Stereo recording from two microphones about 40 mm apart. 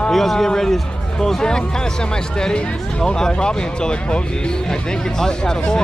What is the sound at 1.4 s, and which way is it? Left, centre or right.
Speech, centre.